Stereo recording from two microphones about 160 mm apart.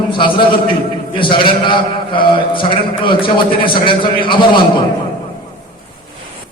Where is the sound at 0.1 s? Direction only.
30° left (ahead or behind).